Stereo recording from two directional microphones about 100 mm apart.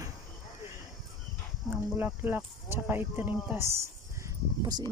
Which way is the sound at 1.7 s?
20° right (ahead or behind).